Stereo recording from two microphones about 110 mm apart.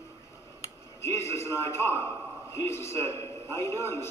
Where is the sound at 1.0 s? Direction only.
25° left (ahead or behind).